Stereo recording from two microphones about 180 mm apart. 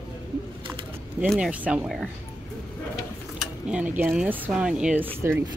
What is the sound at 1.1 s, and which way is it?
Speech, 5° right (ahead or behind).